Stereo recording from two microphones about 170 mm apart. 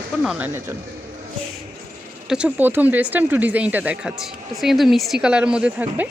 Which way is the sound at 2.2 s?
5° right (ahead or behind).